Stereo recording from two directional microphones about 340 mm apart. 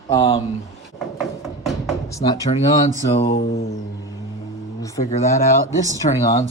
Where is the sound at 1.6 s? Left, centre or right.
Centre.